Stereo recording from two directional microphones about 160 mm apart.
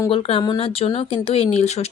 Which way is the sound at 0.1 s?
35° left (ahead or behind).